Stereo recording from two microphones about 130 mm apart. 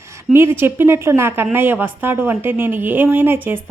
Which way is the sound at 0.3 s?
20° right (ahead or behind).